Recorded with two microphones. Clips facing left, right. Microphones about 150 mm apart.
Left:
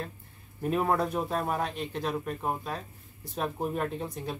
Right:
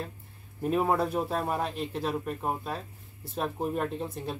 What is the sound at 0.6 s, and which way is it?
Speech, centre (ahead or behind).